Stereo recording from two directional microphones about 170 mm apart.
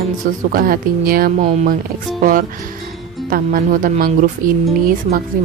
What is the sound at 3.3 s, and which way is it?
Speech, 55° right (ahead or behind).